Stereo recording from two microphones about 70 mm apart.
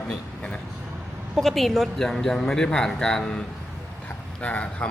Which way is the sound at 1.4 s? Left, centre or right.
Centre.